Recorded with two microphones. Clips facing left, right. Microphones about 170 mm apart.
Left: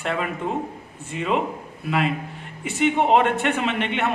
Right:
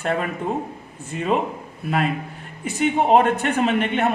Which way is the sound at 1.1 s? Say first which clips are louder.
Right 2 dB; 45° right (ahead or behind).